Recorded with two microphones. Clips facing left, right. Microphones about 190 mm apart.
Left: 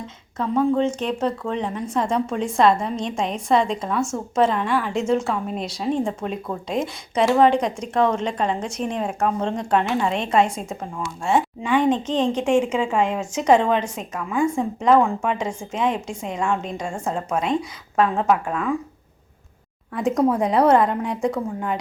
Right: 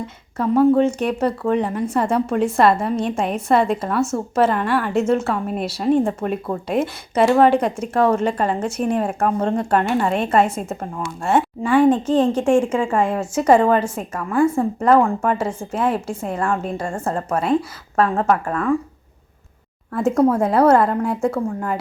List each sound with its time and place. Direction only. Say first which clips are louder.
0.3 s a woman's voice: right 5 dB; 10° right (ahead or behind)
19.9 s a woman's voice: right 3 dB; 5° right (ahead or behind)
21.2 s speech: right 2 dB; 15° left (ahead or behind)